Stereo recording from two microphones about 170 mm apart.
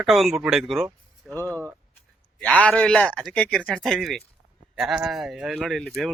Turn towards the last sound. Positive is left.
turn(degrees=0)  # may be behind; listen again after turning